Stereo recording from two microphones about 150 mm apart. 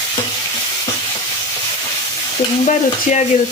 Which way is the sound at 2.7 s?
50° left (ahead or behind).